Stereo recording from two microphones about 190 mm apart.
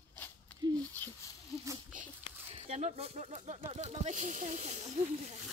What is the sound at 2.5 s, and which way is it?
Speech, 30° right (ahead or behind).